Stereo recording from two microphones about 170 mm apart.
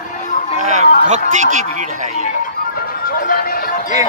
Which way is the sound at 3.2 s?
60° left (ahead or behind).